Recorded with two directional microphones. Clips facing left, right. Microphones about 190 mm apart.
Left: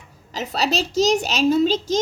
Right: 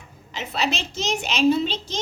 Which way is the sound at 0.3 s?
40° left (ahead or behind).